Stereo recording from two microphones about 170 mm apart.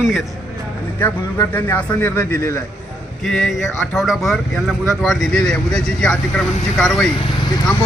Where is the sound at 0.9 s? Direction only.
10° left (ahead or behind).